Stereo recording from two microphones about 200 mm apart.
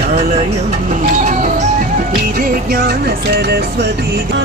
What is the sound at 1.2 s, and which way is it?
Music, 40° right (ahead or behind).